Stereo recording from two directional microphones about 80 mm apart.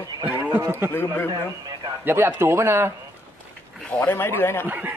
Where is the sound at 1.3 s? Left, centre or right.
Right.